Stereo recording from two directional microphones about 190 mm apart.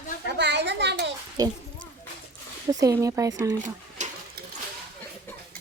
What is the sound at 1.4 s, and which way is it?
Speech, 20° right (ahead or behind).